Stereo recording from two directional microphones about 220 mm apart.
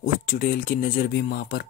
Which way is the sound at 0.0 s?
40° left (ahead or behind).